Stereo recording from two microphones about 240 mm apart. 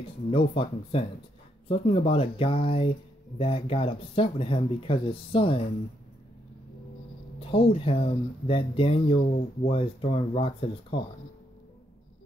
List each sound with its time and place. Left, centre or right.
0.3 s speech: left
7.3 s speech: left